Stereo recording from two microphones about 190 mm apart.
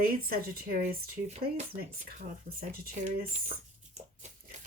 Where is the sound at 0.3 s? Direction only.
50° right (ahead or behind).